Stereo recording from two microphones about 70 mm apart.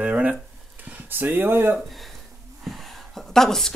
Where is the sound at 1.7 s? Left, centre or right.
Centre.